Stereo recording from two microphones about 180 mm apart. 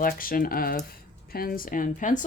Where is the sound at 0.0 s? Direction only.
50° left (ahead or behind).